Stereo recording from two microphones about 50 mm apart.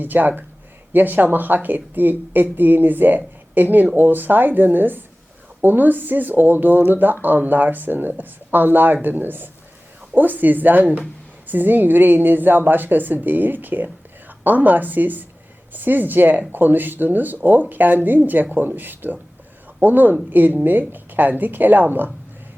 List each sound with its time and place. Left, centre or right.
0.0 s a woman's voice: right